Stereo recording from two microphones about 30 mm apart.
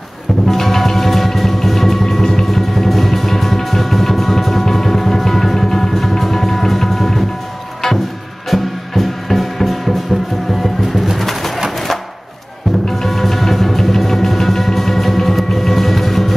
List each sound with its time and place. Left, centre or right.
0.5 s music: centre
8.5 s music: centre
11.1 s bird: centre
11.7 s a sound: centre
13.0 s music: centre